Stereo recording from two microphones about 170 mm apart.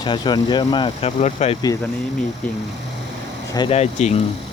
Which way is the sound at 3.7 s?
40° left (ahead or behind).